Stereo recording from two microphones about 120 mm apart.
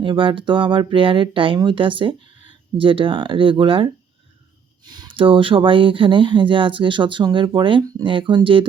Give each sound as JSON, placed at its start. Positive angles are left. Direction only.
{"t": 0.0, "sound": "speech", "side_deg": -45}
{"t": 4.9, "sound": "speech", "side_deg": -40}